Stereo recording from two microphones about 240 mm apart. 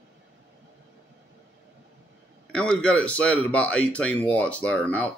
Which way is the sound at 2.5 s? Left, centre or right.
Centre.